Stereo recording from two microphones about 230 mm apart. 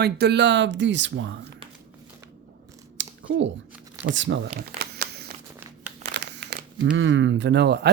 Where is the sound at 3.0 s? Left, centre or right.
Right.